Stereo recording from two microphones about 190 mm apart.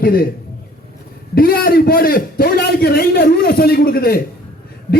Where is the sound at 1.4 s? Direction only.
50° left (ahead or behind).